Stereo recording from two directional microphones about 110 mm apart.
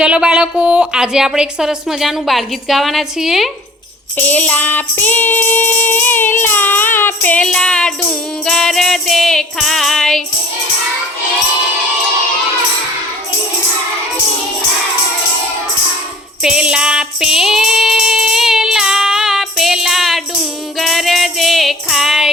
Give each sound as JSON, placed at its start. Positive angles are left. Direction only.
{"t": 0.0, "sound": "speech", "side_deg": -10}
{"t": 4.2, "sound": "music", "side_deg": 15}
{"t": 8.4, "sound": "speech", "side_deg": 5}
{"t": 16.4, "sound": "music", "side_deg": -5}